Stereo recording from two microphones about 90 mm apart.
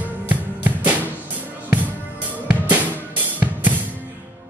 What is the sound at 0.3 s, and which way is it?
Music, 20° right (ahead or behind).